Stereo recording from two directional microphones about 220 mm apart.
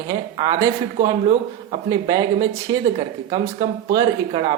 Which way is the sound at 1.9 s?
15° right (ahead or behind).